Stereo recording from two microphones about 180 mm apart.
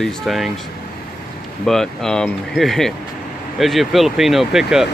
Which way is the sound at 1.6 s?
5° left (ahead or behind).